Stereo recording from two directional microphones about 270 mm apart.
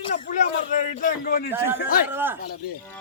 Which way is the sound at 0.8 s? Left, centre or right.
Left.